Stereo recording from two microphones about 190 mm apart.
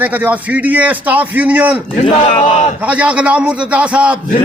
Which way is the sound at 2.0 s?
25° left (ahead or behind).